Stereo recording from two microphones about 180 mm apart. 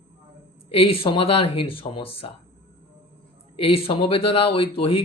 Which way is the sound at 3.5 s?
30° left (ahead or behind).